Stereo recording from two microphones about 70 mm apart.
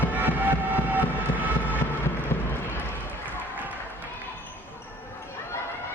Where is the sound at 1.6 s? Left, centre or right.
Left.